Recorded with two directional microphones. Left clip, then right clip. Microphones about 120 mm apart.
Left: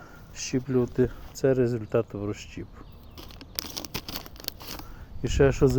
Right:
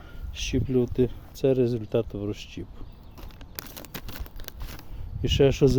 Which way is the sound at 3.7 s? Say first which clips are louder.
Left 6 dB; 10° right (ahead or behind).